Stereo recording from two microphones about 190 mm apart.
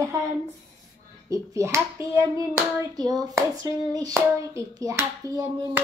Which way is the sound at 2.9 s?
20° right (ahead or behind).